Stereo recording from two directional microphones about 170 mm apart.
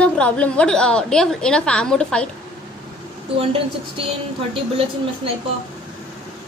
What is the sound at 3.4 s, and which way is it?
Speech, 35° right (ahead or behind).